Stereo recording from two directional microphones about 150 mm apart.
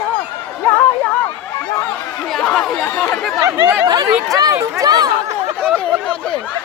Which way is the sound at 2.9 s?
5° left (ahead or behind).